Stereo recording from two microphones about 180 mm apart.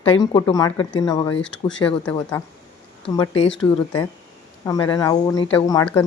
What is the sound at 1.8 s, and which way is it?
Speech, 25° left (ahead or behind).